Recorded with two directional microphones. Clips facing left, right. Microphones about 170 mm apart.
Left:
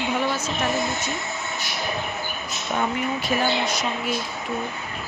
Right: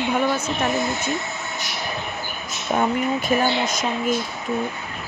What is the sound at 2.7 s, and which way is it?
Speech, 45° right (ahead or behind).